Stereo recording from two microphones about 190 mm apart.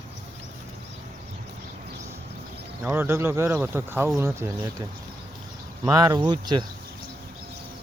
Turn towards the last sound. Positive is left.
turn(degrees=-20)  # may be behind; listen again after turning